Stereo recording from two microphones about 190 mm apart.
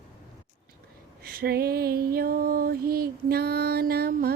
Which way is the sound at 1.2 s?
50° right (ahead or behind).